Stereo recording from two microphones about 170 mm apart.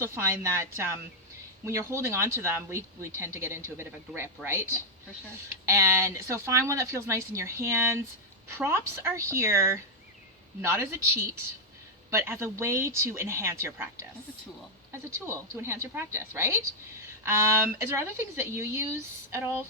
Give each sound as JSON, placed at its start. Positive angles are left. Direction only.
{"t": 0.0, "sound": "speech", "side_deg": -15}
{"t": 5.6, "sound": "speech", "side_deg": -15}